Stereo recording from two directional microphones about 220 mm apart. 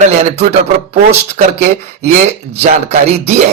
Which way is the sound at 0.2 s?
30° right (ahead or behind).